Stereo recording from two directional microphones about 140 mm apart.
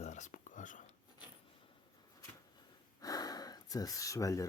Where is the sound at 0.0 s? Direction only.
60° left (ahead or behind).